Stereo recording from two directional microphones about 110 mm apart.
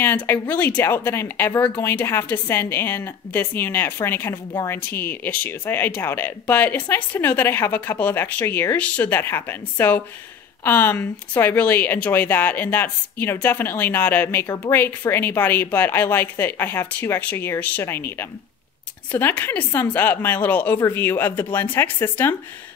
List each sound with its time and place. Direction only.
0.0 s speech: 15° left (ahead or behind)
19.1 s a woman's voice: 20° left (ahead or behind)